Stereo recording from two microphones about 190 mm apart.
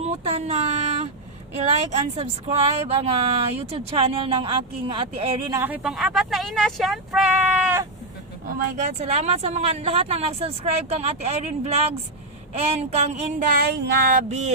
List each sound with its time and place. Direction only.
0.0 s speech: 30° right (ahead or behind)
5.5 s speech: 10° right (ahead or behind)
8.5 s speech: 40° right (ahead or behind)